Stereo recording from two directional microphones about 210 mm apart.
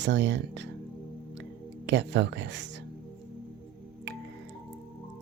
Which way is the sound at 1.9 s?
55° right (ahead or behind).